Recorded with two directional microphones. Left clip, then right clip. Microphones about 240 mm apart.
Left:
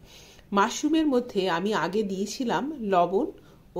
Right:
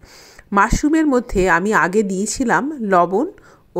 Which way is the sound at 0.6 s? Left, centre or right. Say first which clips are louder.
Right 8 dB; right.